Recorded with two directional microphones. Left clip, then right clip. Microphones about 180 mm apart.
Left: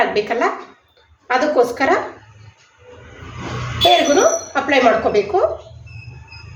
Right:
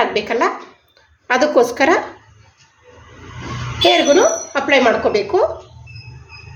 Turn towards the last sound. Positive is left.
turn(degrees=-50)  # may be behind; listen again after turning